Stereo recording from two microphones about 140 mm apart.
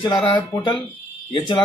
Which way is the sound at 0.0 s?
35° left (ahead or behind).